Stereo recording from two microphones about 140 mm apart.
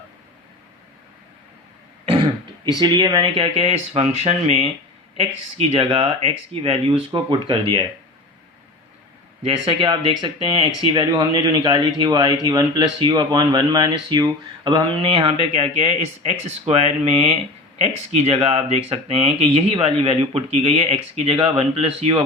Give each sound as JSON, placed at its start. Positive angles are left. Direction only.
{"t": 2.8, "sound": "a man's voice", "side_deg": -30}
{"t": 9.4, "sound": "a man's voice", "side_deg": -40}